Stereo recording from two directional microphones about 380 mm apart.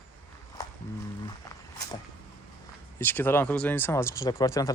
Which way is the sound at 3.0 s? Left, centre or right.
Centre.